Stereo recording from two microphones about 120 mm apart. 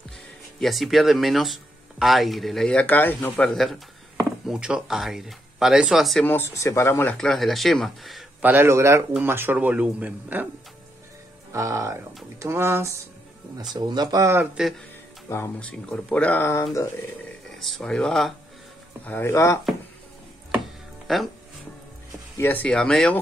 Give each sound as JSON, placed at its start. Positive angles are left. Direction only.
{"t": 0.6, "sound": "speech", "side_deg": 0}
{"t": 3.4, "sound": "speech", "side_deg": 0}
{"t": 6.2, "sound": "speech", "side_deg": 20}
{"t": 7.2, "sound": "speech", "side_deg": 5}
{"t": 8.4, "sound": "a man's voice", "side_deg": -15}
{"t": 11.5, "sound": "a man's voice", "side_deg": -25}
{"t": 13.7, "sound": "speech", "side_deg": -35}
{"t": 14.4, "sound": "speech", "side_deg": -10}
{"t": 15.2, "sound": "speech", "side_deg": 20}
{"t": 15.7, "sound": "speech", "side_deg": 10}
{"t": 17.6, "sound": "speech", "side_deg": 0}
{"t": 19.0, "sound": "speech", "side_deg": 15}
{"t": 21.1, "sound": "speech", "side_deg": 0}
{"t": 22.4, "sound": "speech", "side_deg": 15}